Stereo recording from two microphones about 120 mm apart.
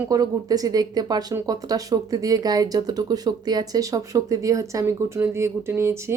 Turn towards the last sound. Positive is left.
turn(degrees=-20)  # may be behind; listen again after turning